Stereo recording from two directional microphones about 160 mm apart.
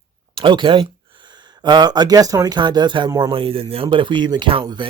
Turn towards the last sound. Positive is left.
turn(degrees=-30)  # may be behind; listen again after turning